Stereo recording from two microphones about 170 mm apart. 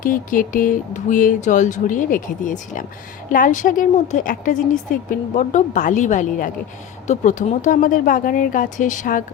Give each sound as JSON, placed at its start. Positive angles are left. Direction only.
{"t": 0.0, "sound": "a woman's voice", "side_deg": 55}